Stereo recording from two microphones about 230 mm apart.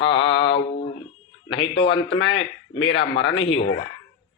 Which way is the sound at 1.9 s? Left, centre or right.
Left.